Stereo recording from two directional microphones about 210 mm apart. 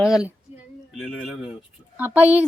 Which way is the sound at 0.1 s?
5° right (ahead or behind).